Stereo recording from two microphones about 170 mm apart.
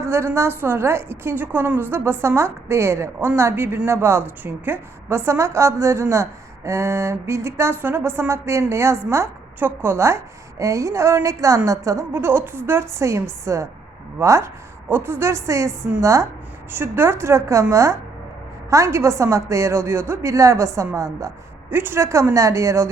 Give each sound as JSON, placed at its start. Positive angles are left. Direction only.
{"t": 0.0, "sound": "a woman's voice", "side_deg": -15}